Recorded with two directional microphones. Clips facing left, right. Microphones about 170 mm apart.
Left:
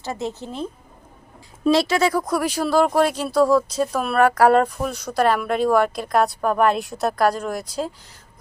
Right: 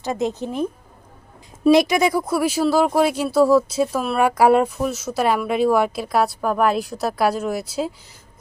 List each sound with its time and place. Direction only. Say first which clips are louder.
0.0 s speech: right 5 dB; 15° right (ahead or behind)